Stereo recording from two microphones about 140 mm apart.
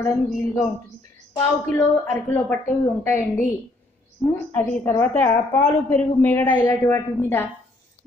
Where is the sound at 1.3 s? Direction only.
15° left (ahead or behind).